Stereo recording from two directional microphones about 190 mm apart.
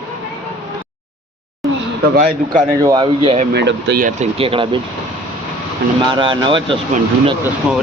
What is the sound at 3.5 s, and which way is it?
Speech, 65° right (ahead or behind).